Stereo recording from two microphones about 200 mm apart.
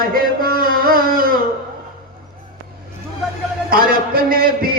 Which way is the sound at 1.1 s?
45° right (ahead or behind).